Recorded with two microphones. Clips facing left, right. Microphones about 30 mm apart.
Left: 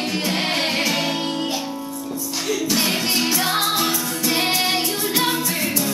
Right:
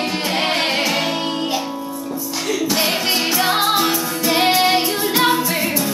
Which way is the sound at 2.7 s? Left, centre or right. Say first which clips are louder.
Right 2 dB; centre.